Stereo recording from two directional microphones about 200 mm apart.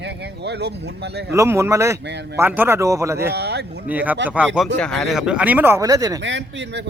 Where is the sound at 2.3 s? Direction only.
10° right (ahead or behind).